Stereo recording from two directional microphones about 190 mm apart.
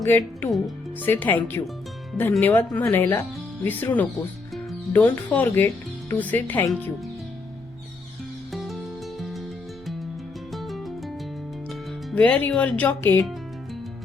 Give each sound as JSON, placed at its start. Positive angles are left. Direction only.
{"t": 0.1, "sound": "speech", "side_deg": 15}
{"t": 8.5, "sound": "music", "side_deg": 0}
{"t": 10.5, "sound": "music", "side_deg": 0}
{"t": 11.7, "sound": "speech", "side_deg": 5}